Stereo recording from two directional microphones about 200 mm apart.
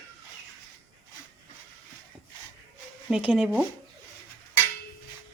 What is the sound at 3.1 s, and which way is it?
Speech, 5° right (ahead or behind).